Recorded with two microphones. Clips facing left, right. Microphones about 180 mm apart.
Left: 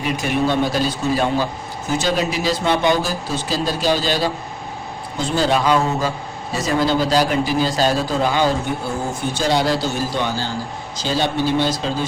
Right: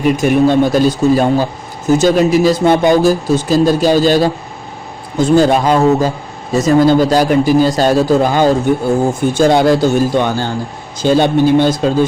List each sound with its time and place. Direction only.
0.0 s speech: 50° right (ahead or behind)